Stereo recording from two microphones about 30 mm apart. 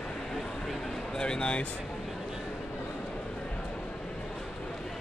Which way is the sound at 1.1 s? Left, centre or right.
Left.